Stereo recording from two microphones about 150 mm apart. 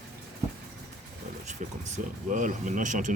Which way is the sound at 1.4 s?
50° right (ahead or behind).